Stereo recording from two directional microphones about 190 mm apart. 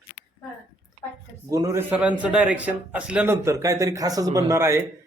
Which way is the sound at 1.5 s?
15° right (ahead or behind).